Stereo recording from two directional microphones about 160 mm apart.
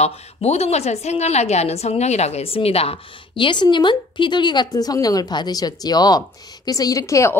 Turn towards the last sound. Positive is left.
turn(degrees=20)  # may be behind; listen again after turning